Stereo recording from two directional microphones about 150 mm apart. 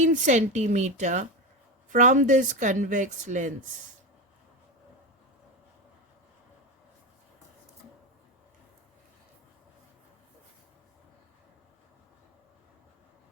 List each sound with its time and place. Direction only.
0.0 s a woman's voice: 55° right (ahead or behind)